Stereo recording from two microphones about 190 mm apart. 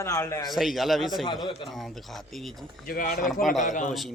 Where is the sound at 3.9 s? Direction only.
Centre (ahead or behind).